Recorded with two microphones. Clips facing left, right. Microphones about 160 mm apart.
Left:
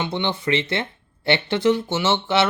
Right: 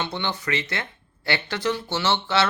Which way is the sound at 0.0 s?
20° left (ahead or behind).